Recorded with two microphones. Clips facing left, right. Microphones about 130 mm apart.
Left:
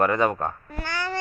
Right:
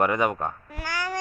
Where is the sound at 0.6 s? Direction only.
10° right (ahead or behind).